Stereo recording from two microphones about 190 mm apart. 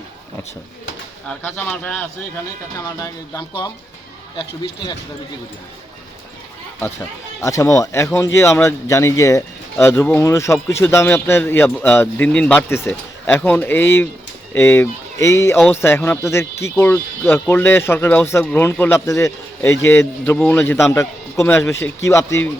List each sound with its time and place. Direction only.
1.3 s speech: 10° left (ahead or behind)
7.4 s speech: 15° left (ahead or behind)